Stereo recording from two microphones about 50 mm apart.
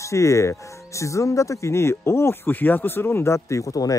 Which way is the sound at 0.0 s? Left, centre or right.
Left.